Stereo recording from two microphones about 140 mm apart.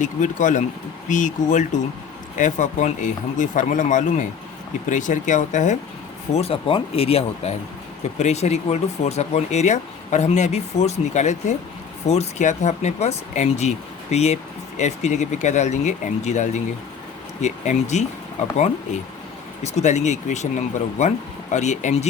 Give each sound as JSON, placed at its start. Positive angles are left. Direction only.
{"t": 0.0, "sound": "speech", "side_deg": 65}
{"t": 6.3, "sound": "speech", "side_deg": 45}
{"t": 19.6, "sound": "speech", "side_deg": 55}